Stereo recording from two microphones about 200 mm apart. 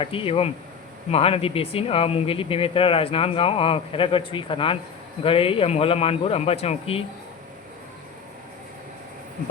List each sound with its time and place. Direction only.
0.0 s speech: 25° left (ahead or behind)